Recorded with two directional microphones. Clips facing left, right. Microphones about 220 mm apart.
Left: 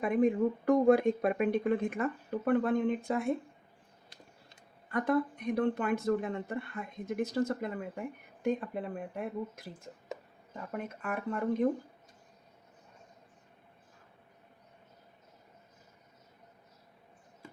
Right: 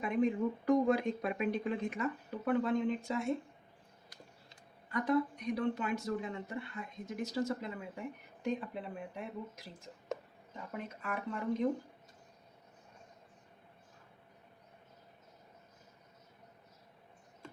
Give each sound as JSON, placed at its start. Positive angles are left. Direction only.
{"t": 0.0, "sound": "speech", "side_deg": 50}
{"t": 4.9, "sound": "speech", "side_deg": 50}